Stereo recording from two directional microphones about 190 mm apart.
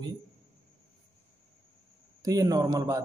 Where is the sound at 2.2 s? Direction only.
20° right (ahead or behind).